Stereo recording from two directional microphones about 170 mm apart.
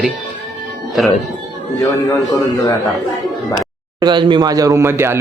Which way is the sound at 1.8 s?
20° left (ahead or behind).